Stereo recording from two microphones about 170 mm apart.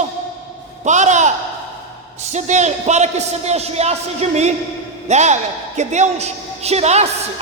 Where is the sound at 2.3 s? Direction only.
45° right (ahead or behind).